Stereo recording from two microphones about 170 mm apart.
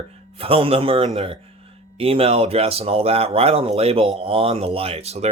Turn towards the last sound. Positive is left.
turn(degrees=-40)  # may be behind; listen again after turning